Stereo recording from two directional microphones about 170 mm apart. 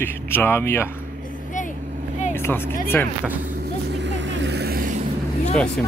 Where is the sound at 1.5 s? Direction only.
50° left (ahead or behind).